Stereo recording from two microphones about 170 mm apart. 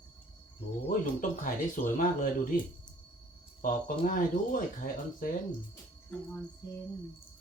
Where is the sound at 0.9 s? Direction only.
50° left (ahead or behind).